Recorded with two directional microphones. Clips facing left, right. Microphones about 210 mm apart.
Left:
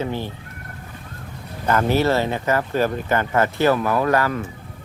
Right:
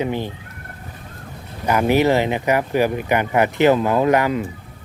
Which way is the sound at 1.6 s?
15° right (ahead or behind).